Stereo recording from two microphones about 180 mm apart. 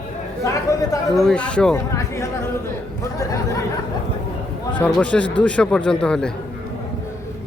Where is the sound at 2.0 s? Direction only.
15° left (ahead or behind).